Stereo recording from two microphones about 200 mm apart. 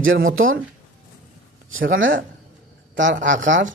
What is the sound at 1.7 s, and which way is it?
Speech, 75° right (ahead or behind).